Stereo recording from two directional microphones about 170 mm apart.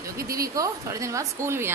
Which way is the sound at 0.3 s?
60° right (ahead or behind).